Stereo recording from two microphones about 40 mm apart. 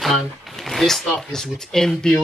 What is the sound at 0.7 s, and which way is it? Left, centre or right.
Speech, centre.